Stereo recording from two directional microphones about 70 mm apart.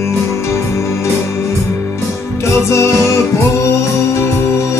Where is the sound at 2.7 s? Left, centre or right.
Left.